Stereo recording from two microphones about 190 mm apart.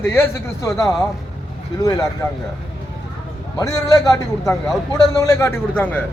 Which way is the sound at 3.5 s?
20° left (ahead or behind).